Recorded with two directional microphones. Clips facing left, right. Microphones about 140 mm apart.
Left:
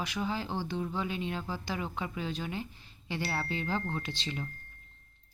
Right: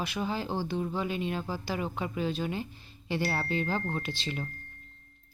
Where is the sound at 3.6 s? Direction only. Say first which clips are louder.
Right 2 dB; 15° right (ahead or behind).